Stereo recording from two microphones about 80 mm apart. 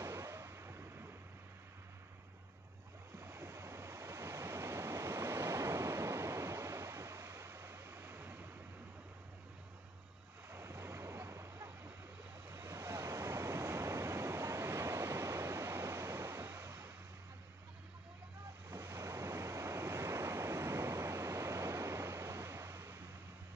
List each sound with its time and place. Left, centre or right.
0.0 s vehicle: right
3.2 s waves: right
10.5 s waves: right
18.7 s waves: right